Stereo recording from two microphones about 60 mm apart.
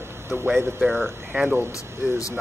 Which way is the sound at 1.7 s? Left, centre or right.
Left.